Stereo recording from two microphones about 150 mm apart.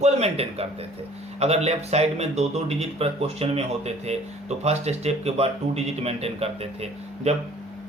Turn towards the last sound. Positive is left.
turn(degrees=-45)  # may be behind; listen again after turning